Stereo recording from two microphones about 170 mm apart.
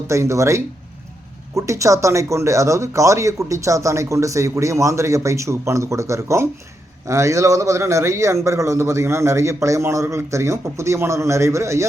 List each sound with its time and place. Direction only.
0.1 s speech: 15° right (ahead or behind)